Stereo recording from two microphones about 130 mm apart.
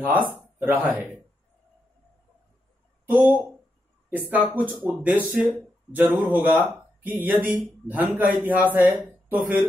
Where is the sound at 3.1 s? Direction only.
10° right (ahead or behind).